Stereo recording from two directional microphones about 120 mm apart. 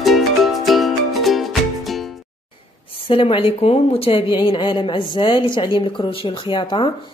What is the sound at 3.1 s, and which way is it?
A woman's voice, 50° left (ahead or behind).